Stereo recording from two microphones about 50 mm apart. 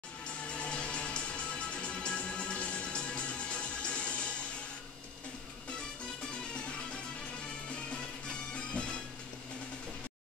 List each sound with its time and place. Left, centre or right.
0.5 s music: left
8.5 s music: left